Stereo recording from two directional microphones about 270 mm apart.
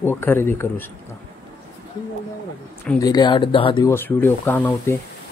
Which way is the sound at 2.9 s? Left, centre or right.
Centre.